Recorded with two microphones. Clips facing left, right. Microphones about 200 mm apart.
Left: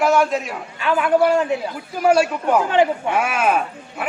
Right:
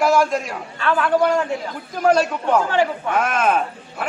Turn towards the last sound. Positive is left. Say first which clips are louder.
# even
turn(degrees=10)  # may be behind; listen again after turning